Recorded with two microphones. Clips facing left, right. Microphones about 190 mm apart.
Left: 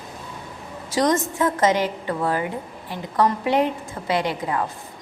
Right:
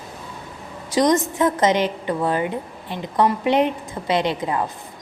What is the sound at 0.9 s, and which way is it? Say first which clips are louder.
A woman's voice: right 3 dB; 15° right (ahead or behind).